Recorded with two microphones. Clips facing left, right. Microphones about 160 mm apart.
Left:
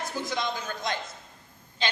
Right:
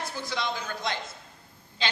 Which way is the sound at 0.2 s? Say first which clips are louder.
Left 3 dB; 45° left (ahead or behind).